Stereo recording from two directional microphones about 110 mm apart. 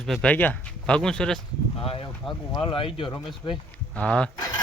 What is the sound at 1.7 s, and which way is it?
Speech, 60° left (ahead or behind).